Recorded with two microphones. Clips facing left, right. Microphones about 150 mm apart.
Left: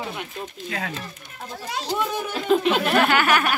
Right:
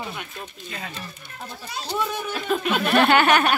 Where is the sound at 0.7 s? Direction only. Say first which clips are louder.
Left 5 dB; 85° left.